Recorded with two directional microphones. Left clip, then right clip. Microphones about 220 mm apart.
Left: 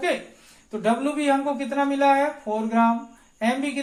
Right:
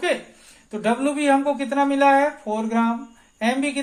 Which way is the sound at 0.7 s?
40° right (ahead or behind).